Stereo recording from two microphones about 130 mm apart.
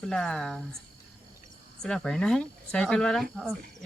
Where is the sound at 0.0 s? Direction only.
5° left (ahead or behind).